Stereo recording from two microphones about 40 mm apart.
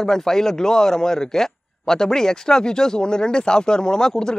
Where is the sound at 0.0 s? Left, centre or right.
Centre.